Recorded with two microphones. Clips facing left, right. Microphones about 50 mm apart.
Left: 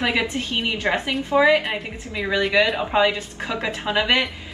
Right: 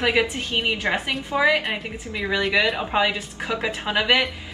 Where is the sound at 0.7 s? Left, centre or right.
Centre.